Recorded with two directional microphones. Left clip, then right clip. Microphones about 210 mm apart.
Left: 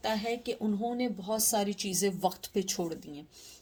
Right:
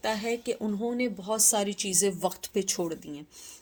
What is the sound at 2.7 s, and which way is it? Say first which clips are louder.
Speech: right 3 dB; 35° right (ahead or behind).